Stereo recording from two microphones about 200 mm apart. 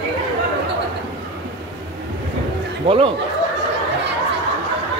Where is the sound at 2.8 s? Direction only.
25° right (ahead or behind).